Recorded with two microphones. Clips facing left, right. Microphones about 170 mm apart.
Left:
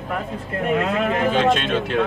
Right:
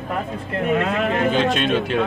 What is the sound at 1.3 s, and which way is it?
Speech, centre (ahead or behind).